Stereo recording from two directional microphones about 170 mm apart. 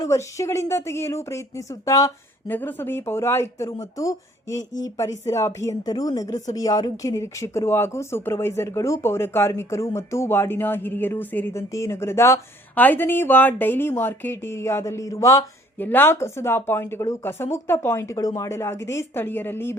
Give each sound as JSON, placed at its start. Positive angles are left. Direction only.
{"t": 0.0, "sound": "speech", "side_deg": 20}